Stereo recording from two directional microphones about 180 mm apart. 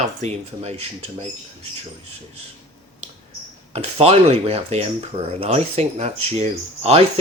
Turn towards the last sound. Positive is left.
turn(degrees=-35)  # may be behind; listen again after turning